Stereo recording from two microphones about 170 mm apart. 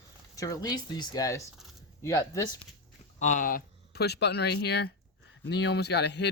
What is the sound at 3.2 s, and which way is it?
Speech, 50° left (ahead or behind).